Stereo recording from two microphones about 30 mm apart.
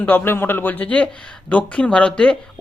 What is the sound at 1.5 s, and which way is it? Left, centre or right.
Speech, left.